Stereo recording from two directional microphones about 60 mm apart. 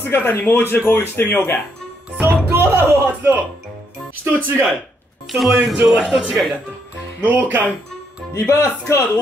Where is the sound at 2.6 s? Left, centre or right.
Right.